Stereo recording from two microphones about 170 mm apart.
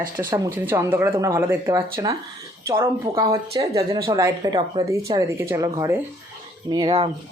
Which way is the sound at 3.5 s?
20° right (ahead or behind).